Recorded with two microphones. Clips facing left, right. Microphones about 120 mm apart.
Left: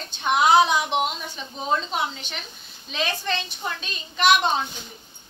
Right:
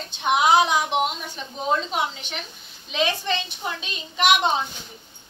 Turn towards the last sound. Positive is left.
turn(degrees=-15)  # may be behind; listen again after turning